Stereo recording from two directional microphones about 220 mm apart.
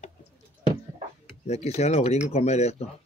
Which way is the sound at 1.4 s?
30° left (ahead or behind).